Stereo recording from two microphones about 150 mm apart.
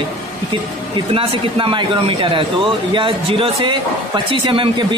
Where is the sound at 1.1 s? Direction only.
35° right (ahead or behind).